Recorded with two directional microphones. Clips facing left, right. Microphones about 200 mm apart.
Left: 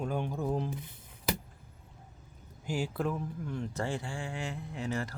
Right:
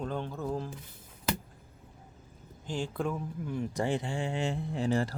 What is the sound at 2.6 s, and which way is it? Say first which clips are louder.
Speech: even; 10° left (ahead or behind).